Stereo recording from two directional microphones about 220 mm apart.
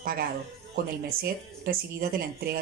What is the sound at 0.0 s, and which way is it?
Speech, 40° right (ahead or behind).